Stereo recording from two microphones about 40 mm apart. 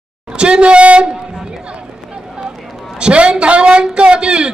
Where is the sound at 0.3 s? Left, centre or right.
Right.